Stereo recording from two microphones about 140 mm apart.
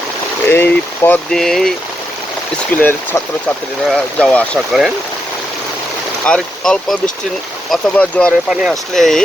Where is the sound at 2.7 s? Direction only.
15° left (ahead or behind).